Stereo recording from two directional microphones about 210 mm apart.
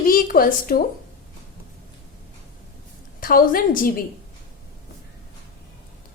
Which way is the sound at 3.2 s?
40° left (ahead or behind).